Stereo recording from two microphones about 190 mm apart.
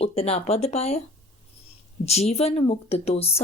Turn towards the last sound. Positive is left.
turn(degrees=30)  # may be behind; listen again after turning